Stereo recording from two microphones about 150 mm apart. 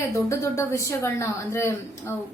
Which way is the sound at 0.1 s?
20° left (ahead or behind).